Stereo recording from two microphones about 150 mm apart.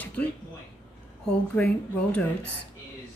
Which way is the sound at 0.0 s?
10° left (ahead or behind).